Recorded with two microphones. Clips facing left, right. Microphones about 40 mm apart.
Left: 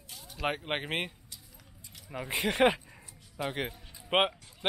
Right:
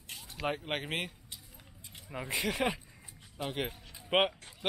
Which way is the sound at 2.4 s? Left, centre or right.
Left.